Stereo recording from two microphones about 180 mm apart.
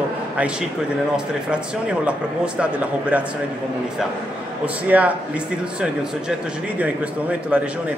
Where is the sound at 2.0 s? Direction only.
5° right (ahead or behind).